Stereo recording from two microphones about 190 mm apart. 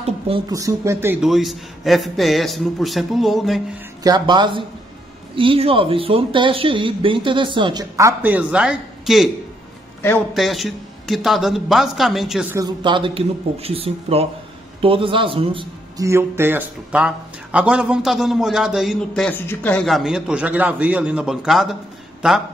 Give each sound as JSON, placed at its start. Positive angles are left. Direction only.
{"t": 0.5, "sound": "a man's voice", "side_deg": -15}
{"t": 4.0, "sound": "speech", "side_deg": -25}
{"t": 10.3, "sound": "a man's voice", "side_deg": 0}
{"t": 12.5, "sound": "a man's voice", "side_deg": -25}
{"t": 16.1, "sound": "a man's voice", "side_deg": -10}